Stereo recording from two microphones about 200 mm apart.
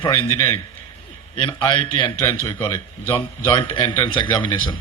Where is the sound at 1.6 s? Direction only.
25° left (ahead or behind).